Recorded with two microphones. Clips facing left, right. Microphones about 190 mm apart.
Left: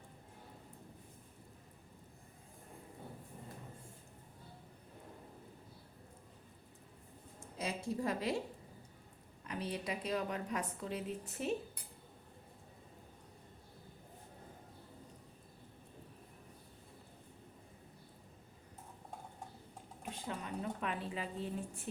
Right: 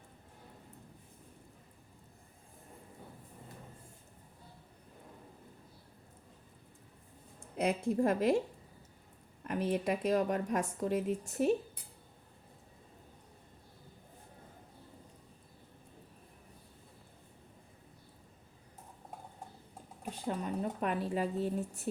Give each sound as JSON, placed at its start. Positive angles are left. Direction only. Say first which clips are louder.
{"t": 7.5, "sound": "a woman's voice", "louder": "right 8 dB", "side_deg": -60}
{"t": 9.4, "sound": "a woman's voice", "louder": "right 8 dB", "side_deg": -50}
{"t": 20.0, "sound": "speech", "louder": "right 6 dB", "side_deg": -40}